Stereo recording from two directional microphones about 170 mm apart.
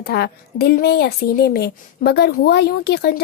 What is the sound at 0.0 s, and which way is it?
A woman's voice, 65° left (ahead or behind).